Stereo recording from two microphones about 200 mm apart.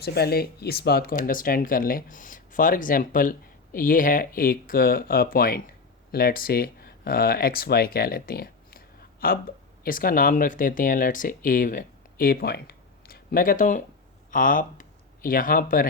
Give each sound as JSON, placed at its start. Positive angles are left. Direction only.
{"t": 0.0, "sound": "speech", "side_deg": 55}